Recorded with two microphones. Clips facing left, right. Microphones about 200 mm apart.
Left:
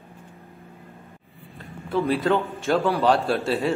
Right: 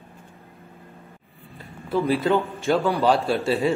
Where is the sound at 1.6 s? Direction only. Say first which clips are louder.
Right 1 dB; centre (ahead or behind).